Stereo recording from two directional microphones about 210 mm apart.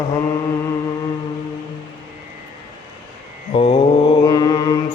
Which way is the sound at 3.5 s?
30° left (ahead or behind).